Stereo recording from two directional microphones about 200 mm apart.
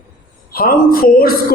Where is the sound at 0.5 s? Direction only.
45° left (ahead or behind).